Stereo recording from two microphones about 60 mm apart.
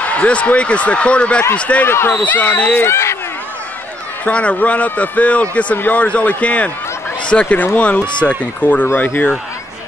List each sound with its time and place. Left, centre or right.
0.0 s a man's voice: left
1.9 s speech: left
2.1 s speech: left
2.9 s speech: left
4.2 s a man's voice: left